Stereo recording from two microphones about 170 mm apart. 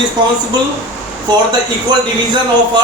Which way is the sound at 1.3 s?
25° right (ahead or behind).